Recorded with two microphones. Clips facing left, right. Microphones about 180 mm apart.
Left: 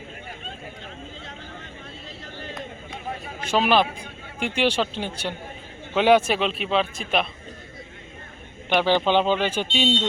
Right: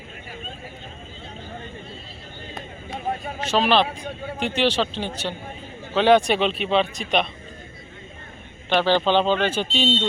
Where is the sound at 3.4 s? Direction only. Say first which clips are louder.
Even; 10° left (ahead or behind).